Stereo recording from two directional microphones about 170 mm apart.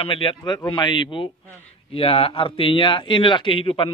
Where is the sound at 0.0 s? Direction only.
35° left (ahead or behind).